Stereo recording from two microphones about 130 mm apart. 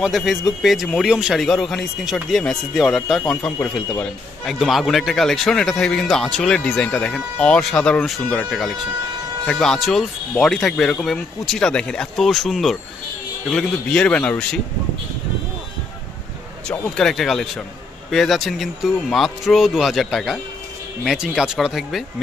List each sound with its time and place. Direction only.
0.0 s speech: centre (ahead or behind)
3.5 s speech: 15° left (ahead or behind)
4.5 s speech: centre (ahead or behind)
16.6 s speech: 5° left (ahead or behind)